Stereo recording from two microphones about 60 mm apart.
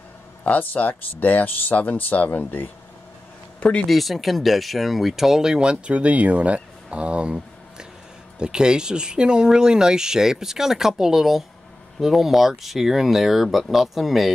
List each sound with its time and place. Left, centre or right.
0.4 s speech: left
3.5 s a sound: centre
3.8 s speech: centre